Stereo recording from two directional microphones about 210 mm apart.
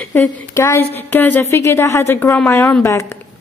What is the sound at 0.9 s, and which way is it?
A woman's voice, 10° left (ahead or behind).